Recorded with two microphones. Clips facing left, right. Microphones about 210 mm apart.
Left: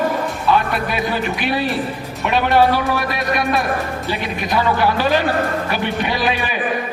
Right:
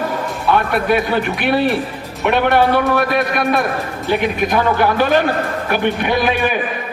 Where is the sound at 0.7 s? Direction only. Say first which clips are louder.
Right 5 dB; 55° right (ahead or behind).